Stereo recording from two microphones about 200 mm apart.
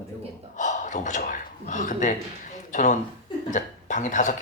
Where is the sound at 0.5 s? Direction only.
40° left (ahead or behind).